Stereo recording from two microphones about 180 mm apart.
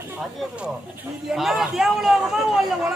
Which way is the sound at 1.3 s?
Centre (ahead or behind).